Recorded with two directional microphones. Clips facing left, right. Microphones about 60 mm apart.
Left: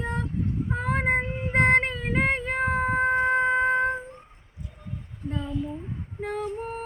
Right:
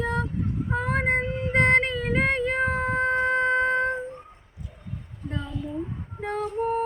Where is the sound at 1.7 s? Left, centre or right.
Left.